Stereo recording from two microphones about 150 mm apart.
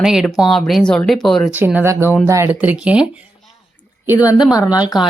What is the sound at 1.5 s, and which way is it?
A woman's voice, 15° right (ahead or behind).